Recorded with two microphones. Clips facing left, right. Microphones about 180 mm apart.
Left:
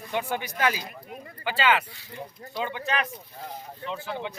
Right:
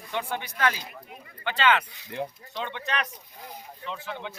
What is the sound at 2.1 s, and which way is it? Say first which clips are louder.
Speech: right 7 dB; 75° right (ahead or behind).